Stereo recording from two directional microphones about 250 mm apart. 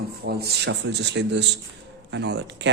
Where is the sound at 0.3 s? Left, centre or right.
Right.